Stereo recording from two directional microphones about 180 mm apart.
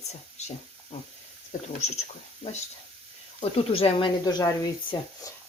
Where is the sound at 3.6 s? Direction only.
30° left (ahead or behind).